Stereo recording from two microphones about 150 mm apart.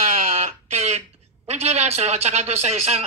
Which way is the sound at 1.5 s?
45° right (ahead or behind).